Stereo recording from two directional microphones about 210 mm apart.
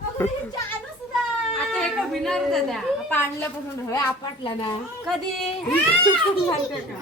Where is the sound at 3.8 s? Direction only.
15° left (ahead or behind).